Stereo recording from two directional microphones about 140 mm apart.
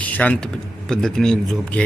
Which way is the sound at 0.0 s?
10° left (ahead or behind).